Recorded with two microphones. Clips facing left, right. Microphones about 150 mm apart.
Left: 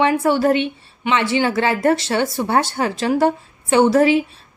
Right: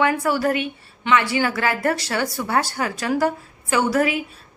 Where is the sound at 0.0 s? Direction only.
25° left (ahead or behind).